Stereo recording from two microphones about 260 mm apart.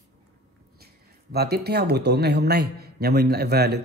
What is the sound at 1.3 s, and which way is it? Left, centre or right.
A man's voice, right.